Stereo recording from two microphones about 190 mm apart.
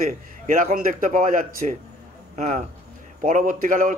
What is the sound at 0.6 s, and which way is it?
A man's voice, 45° right (ahead or behind).